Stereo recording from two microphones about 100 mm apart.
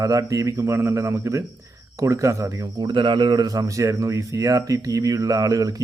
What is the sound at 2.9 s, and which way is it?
Speech, 55° right (ahead or behind).